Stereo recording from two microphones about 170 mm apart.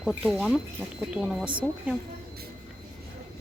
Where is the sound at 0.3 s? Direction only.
Centre (ahead or behind).